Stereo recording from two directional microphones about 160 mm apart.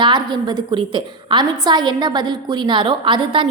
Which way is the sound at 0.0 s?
30° right (ahead or behind).